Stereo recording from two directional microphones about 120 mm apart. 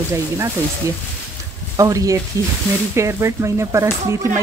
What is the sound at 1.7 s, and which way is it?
Speech, 30° right (ahead or behind).